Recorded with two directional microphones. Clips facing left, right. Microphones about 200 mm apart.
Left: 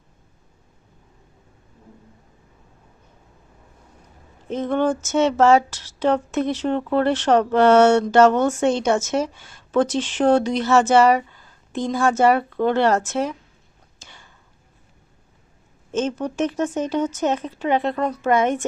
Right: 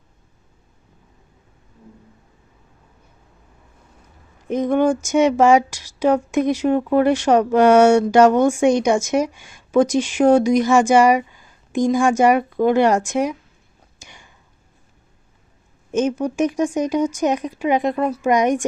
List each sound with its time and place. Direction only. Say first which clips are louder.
4.4 s speech: right 4 dB; 15° right (ahead or behind)
14.0 s a sound: right 2 dB; 15° right (ahead or behind)
15.9 s speech: right 4 dB; 15° right (ahead or behind)